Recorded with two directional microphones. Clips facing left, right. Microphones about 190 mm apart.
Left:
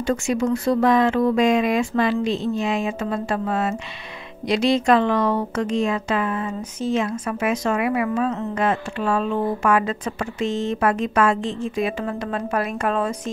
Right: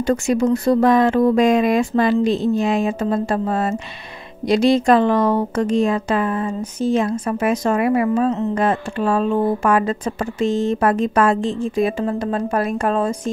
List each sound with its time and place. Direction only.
0.0 s speech: 40° right (ahead or behind)